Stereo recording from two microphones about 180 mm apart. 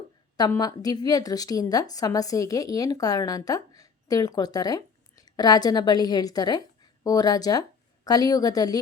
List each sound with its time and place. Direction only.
0.3 s a woman's voice: 20° left (ahead or behind)